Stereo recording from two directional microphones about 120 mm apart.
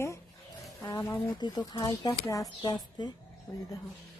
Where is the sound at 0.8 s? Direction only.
35° left (ahead or behind).